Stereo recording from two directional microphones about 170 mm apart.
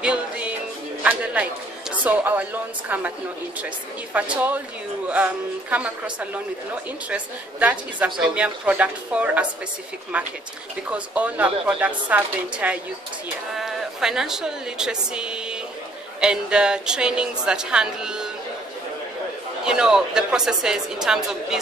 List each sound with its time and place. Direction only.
0.0 s music: 5° right (ahead or behind)
1.0 s speech: 10° right (ahead or behind)
4.1 s a woman's voice: 10° right (ahead or behind)
19.6 s a woman's voice: 5° right (ahead or behind)